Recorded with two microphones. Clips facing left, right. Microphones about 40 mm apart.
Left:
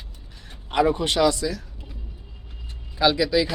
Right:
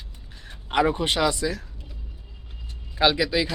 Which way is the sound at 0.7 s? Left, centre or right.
Centre.